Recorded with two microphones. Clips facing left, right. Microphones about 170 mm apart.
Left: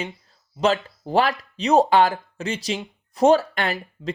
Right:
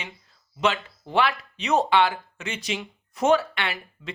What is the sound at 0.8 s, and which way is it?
Speech, 40° left (ahead or behind).